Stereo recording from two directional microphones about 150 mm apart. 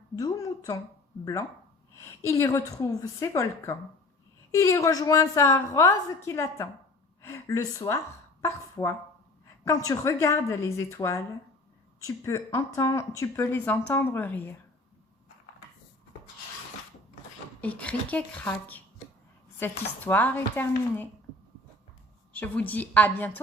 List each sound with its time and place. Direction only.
0.2 s a woman's voice: 25° left (ahead or behind)
17.6 s speech: 10° left (ahead or behind)
22.3 s speech: 10° left (ahead or behind)